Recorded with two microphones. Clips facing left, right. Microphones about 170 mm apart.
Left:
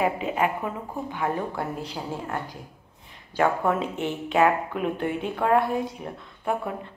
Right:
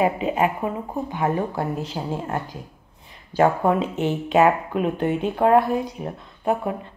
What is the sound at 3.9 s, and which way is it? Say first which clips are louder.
A woman's voice: right 5 dB; 20° right (ahead or behind).